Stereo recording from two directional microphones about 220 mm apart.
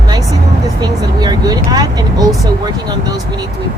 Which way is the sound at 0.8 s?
20° right (ahead or behind).